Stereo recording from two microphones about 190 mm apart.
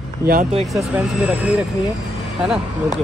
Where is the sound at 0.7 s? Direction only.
5° right (ahead or behind).